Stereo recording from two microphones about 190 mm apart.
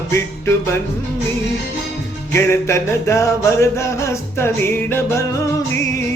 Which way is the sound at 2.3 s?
15° left (ahead or behind).